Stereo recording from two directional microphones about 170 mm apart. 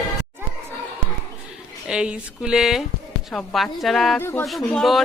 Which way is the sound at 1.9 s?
5° right (ahead or behind).